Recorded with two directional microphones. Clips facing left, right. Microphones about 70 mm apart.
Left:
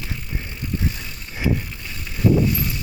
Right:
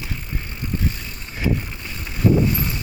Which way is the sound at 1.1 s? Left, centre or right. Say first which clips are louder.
Left 1 dB; right.